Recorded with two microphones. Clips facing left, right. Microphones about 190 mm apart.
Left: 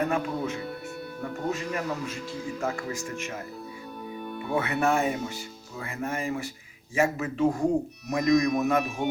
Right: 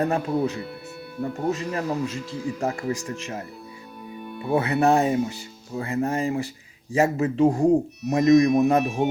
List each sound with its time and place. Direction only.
0.0 s speech: 35° right (ahead or behind)
4.5 s a man's voice: 30° right (ahead or behind)